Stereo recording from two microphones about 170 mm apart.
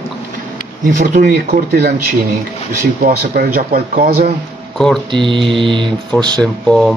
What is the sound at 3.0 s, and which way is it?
Speech, 60° right (ahead or behind).